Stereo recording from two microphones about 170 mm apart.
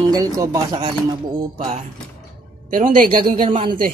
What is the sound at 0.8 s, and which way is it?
Speech, 35° right (ahead or behind).